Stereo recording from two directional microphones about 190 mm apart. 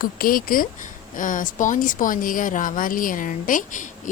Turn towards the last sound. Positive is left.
turn(degrees=40)  # may be behind; listen again after turning